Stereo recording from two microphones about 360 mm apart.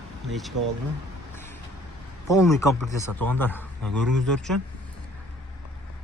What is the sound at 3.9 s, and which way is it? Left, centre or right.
Speech, right.